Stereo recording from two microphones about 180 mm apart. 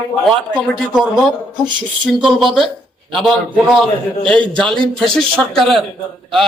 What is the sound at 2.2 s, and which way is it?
Speech, centre (ahead or behind).